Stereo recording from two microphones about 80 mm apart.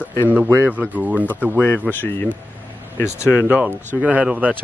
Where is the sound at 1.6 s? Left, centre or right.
Left.